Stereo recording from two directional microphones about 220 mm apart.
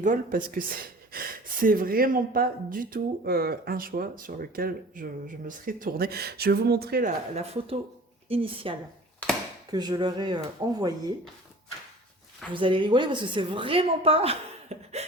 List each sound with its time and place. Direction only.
0.0 s speech: 40° right (ahead or behind)
7.3 s a woman's voice: 30° right (ahead or behind)
12.5 s a woman's voice: 20° right (ahead or behind)